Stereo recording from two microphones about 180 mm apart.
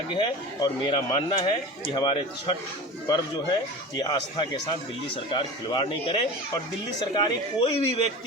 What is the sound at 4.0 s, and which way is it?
Speech, 25° left (ahead or behind).